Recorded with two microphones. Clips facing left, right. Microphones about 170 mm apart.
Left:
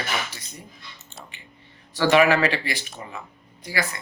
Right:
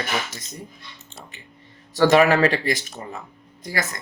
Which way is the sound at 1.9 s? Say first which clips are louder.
Right 2 dB; 40° right (ahead or behind).